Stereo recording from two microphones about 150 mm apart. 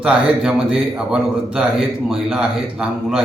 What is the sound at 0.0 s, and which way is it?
A man's voice, 5° right (ahead or behind).